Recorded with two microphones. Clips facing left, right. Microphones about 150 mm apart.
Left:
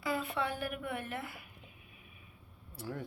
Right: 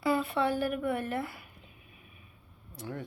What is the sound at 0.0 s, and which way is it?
A woman's voice, 30° right (ahead or behind).